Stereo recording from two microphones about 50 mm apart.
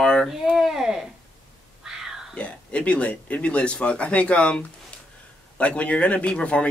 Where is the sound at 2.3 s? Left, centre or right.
Left.